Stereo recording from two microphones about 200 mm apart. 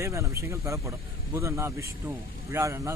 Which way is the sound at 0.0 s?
15° right (ahead or behind).